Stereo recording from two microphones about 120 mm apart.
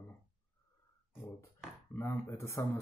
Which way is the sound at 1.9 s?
20° left (ahead or behind).